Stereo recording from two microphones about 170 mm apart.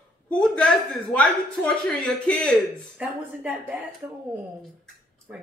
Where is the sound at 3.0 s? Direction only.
10° right (ahead or behind).